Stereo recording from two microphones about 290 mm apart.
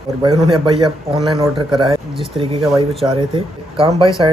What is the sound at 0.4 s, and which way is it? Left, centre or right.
Speech, centre.